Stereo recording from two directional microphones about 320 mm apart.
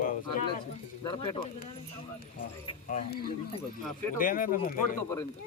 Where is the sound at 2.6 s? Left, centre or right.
Centre.